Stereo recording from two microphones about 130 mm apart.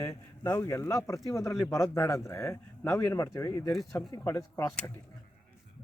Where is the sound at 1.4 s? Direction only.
Centre (ahead or behind).